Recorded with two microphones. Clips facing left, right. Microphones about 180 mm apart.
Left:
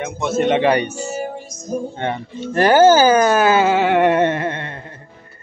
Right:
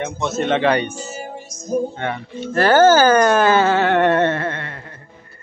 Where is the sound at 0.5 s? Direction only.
15° left (ahead or behind).